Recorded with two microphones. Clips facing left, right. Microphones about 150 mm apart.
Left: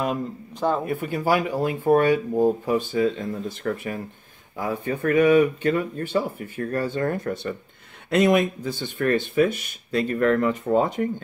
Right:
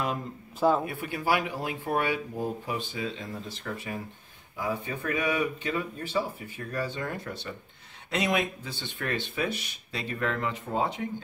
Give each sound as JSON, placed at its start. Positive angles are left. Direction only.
{"t": 0.6, "sound": "speech", "side_deg": -5}
{"t": 0.8, "sound": "speech", "side_deg": 45}